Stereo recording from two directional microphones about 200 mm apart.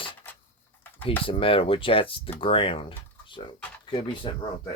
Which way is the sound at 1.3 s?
25° left (ahead or behind).